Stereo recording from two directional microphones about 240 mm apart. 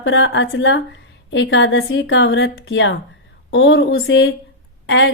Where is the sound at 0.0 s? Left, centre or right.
Left.